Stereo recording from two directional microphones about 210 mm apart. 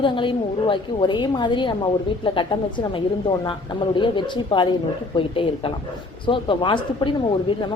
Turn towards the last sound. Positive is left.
turn(degrees=25)  # may be behind; listen again after turning